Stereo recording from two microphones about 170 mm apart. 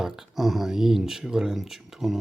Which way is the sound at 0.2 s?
Centre (ahead or behind).